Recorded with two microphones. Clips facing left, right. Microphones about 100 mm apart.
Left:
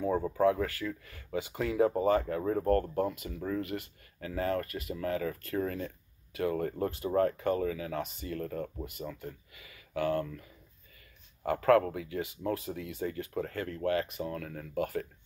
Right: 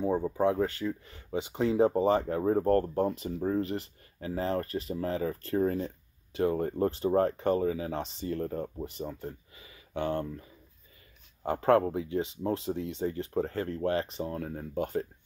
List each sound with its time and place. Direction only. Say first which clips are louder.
0.4 s speech: left 1 dB; 25° right (ahead or behind)